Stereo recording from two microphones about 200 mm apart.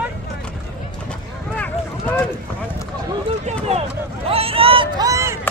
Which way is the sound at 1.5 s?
10° left (ahead or behind).